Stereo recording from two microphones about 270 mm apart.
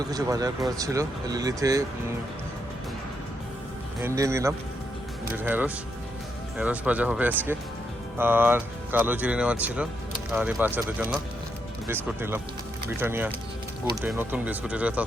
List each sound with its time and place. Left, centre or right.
0.1 s speech: centre
4.0 s speech: centre